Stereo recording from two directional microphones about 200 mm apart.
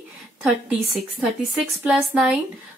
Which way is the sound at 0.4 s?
5° right (ahead or behind).